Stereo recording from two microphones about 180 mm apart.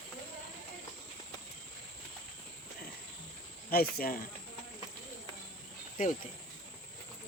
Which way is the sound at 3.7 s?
55° left (ahead or behind).